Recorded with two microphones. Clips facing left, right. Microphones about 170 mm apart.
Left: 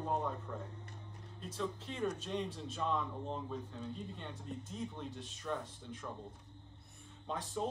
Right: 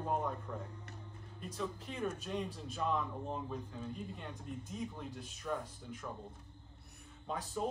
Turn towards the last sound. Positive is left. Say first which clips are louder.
# even
turn(degrees=-5)  # may be behind; listen again after turning